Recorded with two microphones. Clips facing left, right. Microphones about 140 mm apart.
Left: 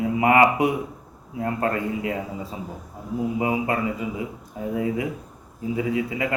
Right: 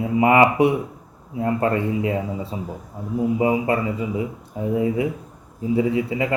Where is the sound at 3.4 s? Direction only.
30° right (ahead or behind).